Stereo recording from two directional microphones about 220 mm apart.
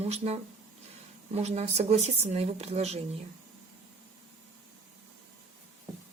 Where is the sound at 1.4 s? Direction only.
30° right (ahead or behind).